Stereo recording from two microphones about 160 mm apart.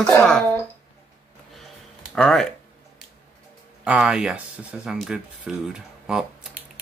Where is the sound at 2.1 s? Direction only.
5° left (ahead or behind).